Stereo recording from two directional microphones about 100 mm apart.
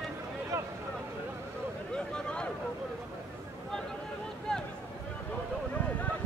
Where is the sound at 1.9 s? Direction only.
10° left (ahead or behind).